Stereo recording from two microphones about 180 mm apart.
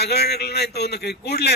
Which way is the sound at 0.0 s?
65° left (ahead or behind).